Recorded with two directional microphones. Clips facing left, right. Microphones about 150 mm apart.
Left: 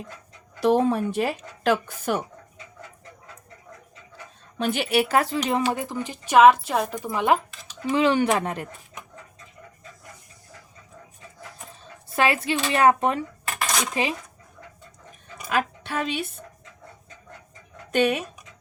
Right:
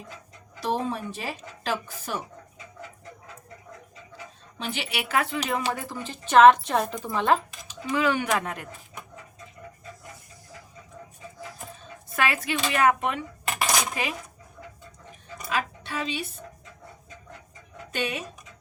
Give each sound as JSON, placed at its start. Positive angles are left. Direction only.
{"t": 0.6, "sound": "speech", "side_deg": 60}
{"t": 4.5, "sound": "speech", "side_deg": 50}
{"t": 5.8, "sound": "speech", "side_deg": 15}
{"t": 7.6, "sound": "speech", "side_deg": 25}
{"t": 12.1, "sound": "speech", "side_deg": 30}
{"t": 15.4, "sound": "music", "side_deg": 55}
{"t": 17.9, "sound": "speech", "side_deg": 55}